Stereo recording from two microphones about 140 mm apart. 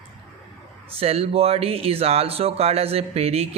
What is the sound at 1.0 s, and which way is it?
Speech, 45° right (ahead or behind).